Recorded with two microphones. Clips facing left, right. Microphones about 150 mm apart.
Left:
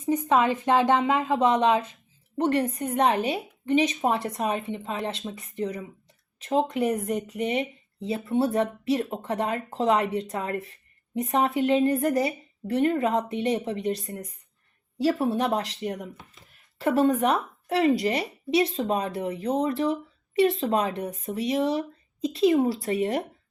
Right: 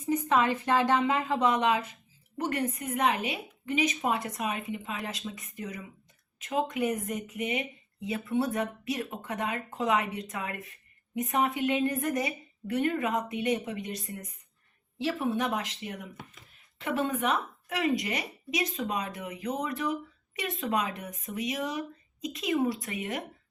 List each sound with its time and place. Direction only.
0.0 s speech: 20° left (ahead or behind)